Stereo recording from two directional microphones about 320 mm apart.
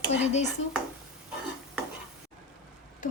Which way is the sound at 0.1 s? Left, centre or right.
Left.